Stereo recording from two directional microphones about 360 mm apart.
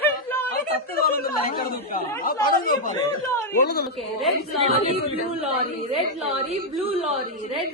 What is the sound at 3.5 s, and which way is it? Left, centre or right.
Speech, left.